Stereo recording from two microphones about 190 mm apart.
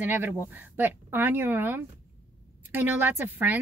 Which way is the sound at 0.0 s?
10° right (ahead or behind).